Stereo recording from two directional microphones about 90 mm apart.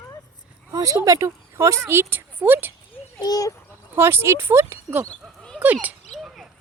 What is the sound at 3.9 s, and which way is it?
Speech, 25° right (ahead or behind).